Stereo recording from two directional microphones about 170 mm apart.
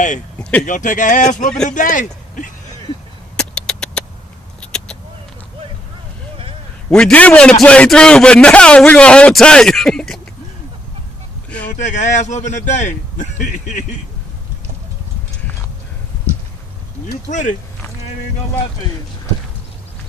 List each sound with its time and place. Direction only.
0.6 s a man's voice: 50° left (ahead or behind)
3.3 s a sound: 5° left (ahead or behind)
6.9 s a man's voice: 5° left (ahead or behind)
11.8 s a man's voice: 45° left (ahead or behind)
17.2 s a man's voice: 45° left (ahead or behind)